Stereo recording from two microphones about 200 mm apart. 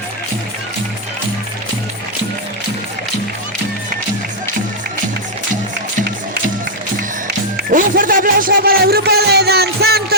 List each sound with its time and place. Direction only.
7.7 s speech: 40° right (ahead or behind)